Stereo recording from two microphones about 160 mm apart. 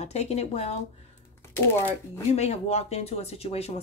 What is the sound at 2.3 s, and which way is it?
A woman's voice, 40° left (ahead or behind).